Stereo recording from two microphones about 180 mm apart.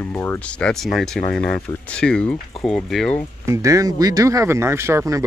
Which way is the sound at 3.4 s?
15° right (ahead or behind).